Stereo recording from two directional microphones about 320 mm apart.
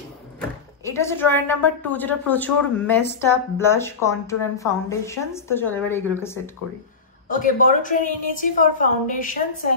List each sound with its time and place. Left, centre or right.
0.8 s a woman's voice: centre
7.2 s a woman's voice: left